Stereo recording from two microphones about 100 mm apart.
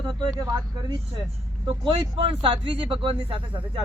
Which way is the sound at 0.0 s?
45° right (ahead or behind).